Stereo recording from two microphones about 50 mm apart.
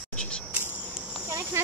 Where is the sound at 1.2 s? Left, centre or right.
Right.